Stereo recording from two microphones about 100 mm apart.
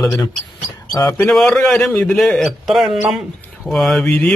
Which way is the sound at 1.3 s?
5° left (ahead or behind).